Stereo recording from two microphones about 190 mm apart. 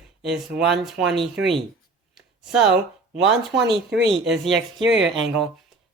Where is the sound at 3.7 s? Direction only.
60° right (ahead or behind).